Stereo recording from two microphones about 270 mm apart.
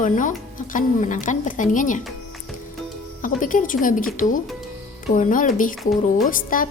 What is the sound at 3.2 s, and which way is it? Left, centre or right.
A woman's voice, left.